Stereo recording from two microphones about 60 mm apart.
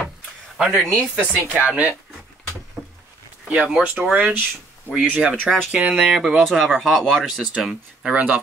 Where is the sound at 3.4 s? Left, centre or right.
Centre.